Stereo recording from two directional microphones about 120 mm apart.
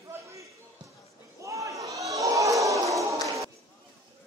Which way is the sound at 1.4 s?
25° right (ahead or behind).